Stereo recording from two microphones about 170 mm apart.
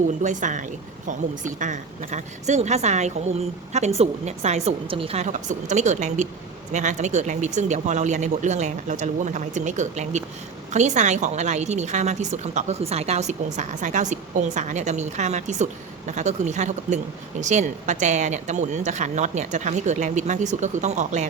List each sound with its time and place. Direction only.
0.1 s a woman's voice: 45° right (ahead or behind)